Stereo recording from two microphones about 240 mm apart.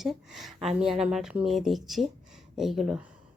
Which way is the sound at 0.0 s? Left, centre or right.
Centre.